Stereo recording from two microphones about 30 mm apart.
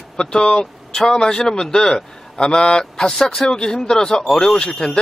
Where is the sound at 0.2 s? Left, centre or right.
Left.